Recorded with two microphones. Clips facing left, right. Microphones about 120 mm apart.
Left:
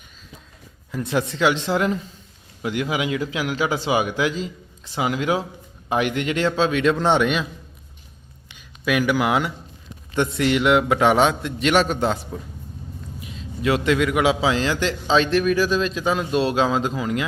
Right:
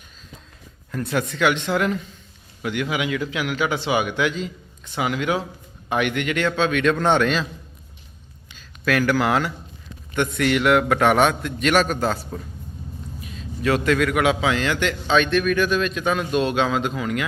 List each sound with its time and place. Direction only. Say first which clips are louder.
1.0 s a man's voice: left 1 dB; 25° left (ahead or behind)
8.8 s speech: even; 10° left (ahead or behind)
10.2 s a man's voice: left 1 dB; 25° left (ahead or behind)